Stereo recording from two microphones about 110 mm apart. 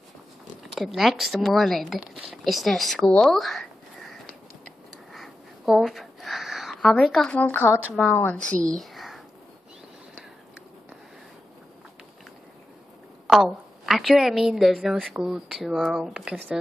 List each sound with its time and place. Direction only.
0.7 s a woman's voice: centre (ahead or behind)
4.6 s a sound: centre (ahead or behind); by 7.7 s 15° left (ahead or behind)
8.0 s a woman's voice: 20° left (ahead or behind)
8.4 s speech: 5° left (ahead or behind)
13.3 s a woman's voice: centre (ahead or behind)